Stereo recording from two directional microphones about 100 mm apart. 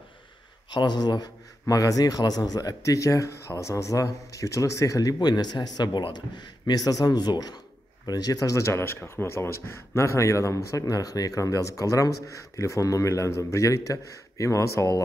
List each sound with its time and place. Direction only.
0.7 s speech: 50° left (ahead or behind); by 14.9 s 30° left (ahead or behind)